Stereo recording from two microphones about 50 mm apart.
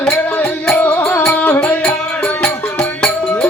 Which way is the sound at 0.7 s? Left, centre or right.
Left.